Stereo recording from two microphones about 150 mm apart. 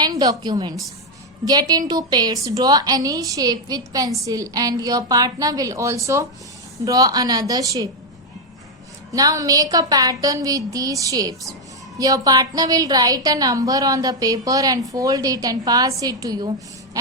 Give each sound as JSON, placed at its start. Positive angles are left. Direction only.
{"t": 0.0, "sound": "a woman's voice", "side_deg": -25}
{"t": 9.1, "sound": "a woman's voice", "side_deg": -25}